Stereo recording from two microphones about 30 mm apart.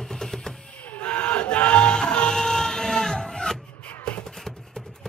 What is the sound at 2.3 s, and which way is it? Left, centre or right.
Vehicle, centre.